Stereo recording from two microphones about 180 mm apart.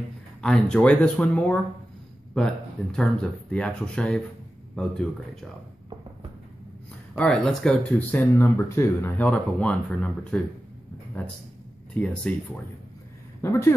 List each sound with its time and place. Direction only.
0.4 s speech: 5° left (ahead or behind)
7.2 s speech: 5° left (ahead or behind)
13.4 s speech: 15° left (ahead or behind)